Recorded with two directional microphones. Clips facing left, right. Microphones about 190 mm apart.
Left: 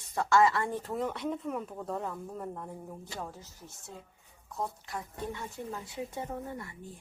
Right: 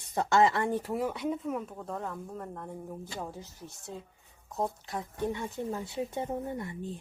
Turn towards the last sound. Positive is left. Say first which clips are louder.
# right 5 dB
turn(degrees=-25)  # may be behind; listen again after turning